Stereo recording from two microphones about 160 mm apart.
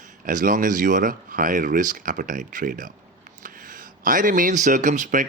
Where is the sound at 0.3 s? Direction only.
55° right (ahead or behind).